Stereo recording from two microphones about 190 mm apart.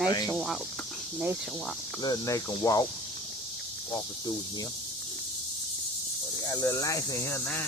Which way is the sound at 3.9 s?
20° left (ahead or behind).